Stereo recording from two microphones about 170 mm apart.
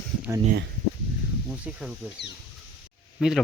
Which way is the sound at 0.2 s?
20° right (ahead or behind).